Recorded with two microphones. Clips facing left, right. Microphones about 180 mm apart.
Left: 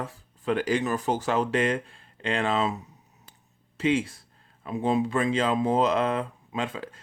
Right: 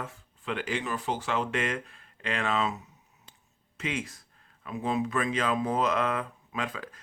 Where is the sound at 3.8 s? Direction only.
30° left (ahead or behind).